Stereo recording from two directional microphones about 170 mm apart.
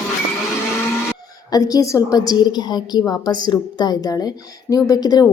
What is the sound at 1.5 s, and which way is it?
A woman's voice, 20° left (ahead or behind).